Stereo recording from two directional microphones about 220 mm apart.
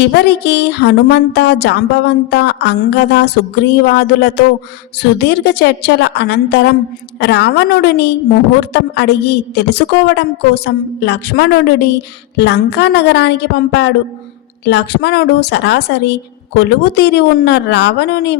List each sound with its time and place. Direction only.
0.1 s speech: 50° left (ahead or behind)